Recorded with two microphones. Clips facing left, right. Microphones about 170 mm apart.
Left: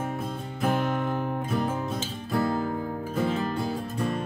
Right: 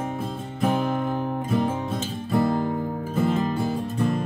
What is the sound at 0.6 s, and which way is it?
Music, centre (ahead or behind).